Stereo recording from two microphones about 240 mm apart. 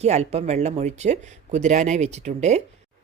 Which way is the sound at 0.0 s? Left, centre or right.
Right.